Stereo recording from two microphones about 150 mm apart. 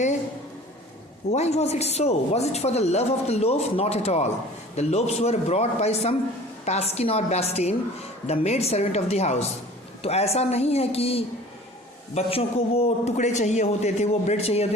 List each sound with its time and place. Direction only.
1.3 s speech: 45° left (ahead or behind)